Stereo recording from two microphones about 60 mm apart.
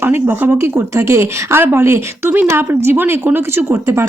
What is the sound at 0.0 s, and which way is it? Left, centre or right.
Speech, right.